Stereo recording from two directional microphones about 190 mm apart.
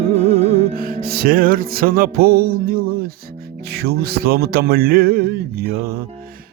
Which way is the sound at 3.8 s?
55° right (ahead or behind).